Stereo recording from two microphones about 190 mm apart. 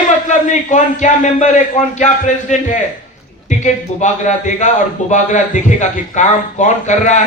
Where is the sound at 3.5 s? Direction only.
40° left (ahead or behind).